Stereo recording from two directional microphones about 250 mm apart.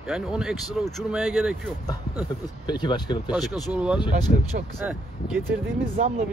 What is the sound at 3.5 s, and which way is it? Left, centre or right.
Speech, centre.